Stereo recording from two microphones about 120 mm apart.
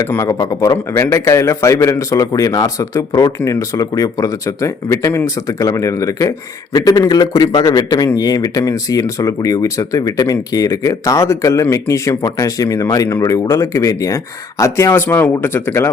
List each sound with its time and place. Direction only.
0.0 s a man's voice: 25° left (ahead or behind)